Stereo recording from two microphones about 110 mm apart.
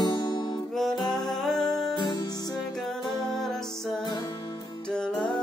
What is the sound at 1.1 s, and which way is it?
Music, 40° left (ahead or behind).